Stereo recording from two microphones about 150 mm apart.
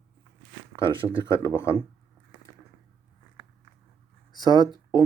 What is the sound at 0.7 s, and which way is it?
Speech, 35° right (ahead or behind).